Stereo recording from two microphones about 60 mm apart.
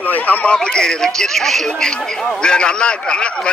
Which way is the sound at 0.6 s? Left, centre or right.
Centre.